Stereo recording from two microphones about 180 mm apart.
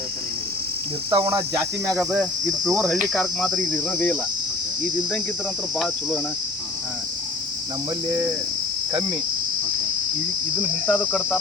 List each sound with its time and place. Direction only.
1.1 s speech: 20° right (ahead or behind)
1.9 s cricket: 5° right (ahead or behind)
5.7 s cricket: centre (ahead or behind)
10.8 s cricket: centre (ahead or behind)